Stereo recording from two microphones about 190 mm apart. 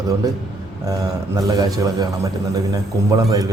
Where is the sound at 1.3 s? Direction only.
20° right (ahead or behind).